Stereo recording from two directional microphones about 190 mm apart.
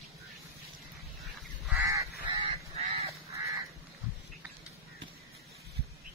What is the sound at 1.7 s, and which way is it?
Goose, 15° right (ahead or behind).